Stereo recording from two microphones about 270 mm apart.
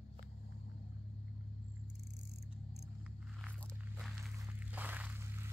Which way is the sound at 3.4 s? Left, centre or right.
Centre.